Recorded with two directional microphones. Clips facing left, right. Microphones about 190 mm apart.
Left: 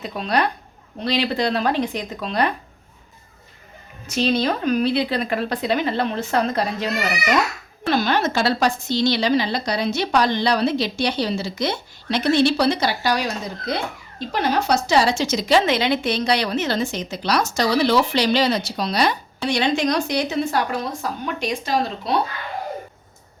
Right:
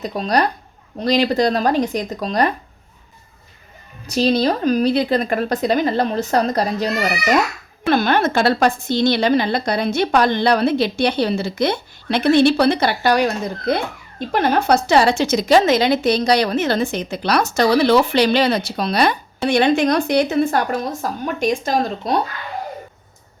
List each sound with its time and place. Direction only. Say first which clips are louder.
0.0 s a woman's voice: right 3 dB; 40° right (ahead or behind)
4.0 s a woman's voice: right 4 dB; 35° right (ahead or behind)
7.9 s a woman's voice: right 3 dB; 55° right (ahead or behind)